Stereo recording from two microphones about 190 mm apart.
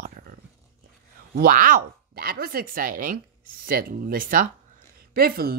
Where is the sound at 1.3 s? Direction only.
45° right (ahead or behind).